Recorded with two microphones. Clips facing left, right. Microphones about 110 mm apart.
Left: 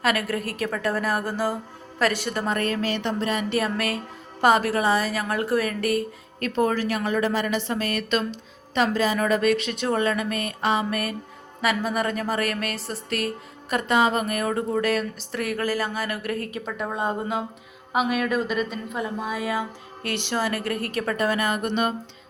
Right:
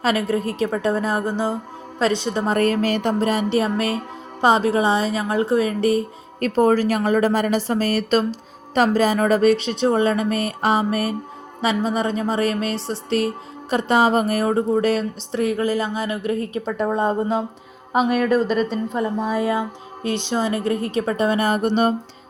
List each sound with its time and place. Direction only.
0.0 s a woman's voice: 25° right (ahead or behind)
2.5 s a woman's voice: 40° right (ahead or behind)
6.4 s a woman's voice: 40° right (ahead or behind)
20.0 s a woman's voice: 20° right (ahead or behind); by 21.9 s 35° right (ahead or behind)